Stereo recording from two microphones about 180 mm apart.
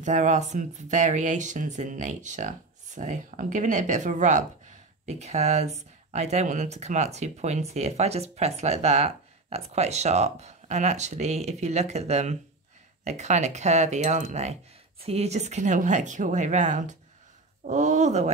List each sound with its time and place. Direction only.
0.0 s speech: 40° right (ahead or behind)